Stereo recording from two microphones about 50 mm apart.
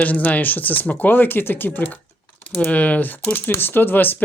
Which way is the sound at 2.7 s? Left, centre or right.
Left.